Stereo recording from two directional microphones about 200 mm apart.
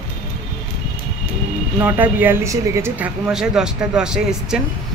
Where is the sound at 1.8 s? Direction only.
10° right (ahead or behind).